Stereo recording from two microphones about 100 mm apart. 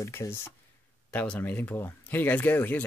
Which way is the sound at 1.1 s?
15° left (ahead or behind).